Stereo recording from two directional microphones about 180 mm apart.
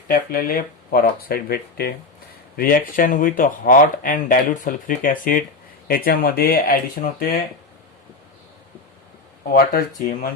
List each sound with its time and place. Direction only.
0.1 s speech: 55° left (ahead or behind)
9.5 s speech: 55° left (ahead or behind)